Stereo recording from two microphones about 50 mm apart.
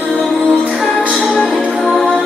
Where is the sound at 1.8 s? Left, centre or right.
Centre.